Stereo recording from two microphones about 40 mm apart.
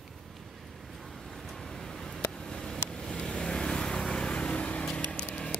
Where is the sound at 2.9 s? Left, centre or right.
Centre.